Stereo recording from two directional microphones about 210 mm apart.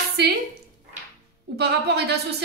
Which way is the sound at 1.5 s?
50° right (ahead or behind).